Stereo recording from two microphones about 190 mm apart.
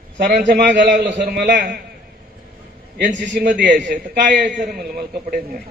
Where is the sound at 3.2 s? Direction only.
65° right (ahead or behind).